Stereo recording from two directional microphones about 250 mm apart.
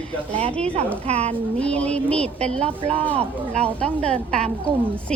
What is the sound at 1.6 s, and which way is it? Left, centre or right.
Speech, centre.